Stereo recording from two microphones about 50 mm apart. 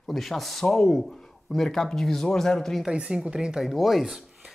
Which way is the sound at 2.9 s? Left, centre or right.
Centre.